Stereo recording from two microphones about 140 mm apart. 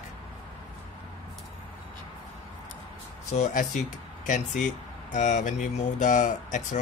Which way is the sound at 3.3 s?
65° left (ahead or behind).